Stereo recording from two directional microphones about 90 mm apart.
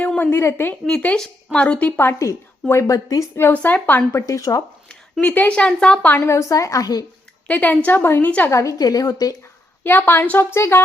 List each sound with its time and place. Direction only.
0.0 s a woman's voice: 20° left (ahead or behind)
1.0 s a woman's voice: 10° left (ahead or behind)
2.0 s a woman's voice: 25° left (ahead or behind)
3.5 s speech: 20° left (ahead or behind)
4.3 s a woman's voice: 40° left (ahead or behind)
5.2 s a woman's voice: 20° left (ahead or behind)
6.2 s a woman's voice: 35° left (ahead or behind)
7.4 s a woman's voice: 15° left (ahead or behind)
8.4 s a woman's voice: 35° left (ahead or behind)
9.8 s speech: 25° left (ahead or behind)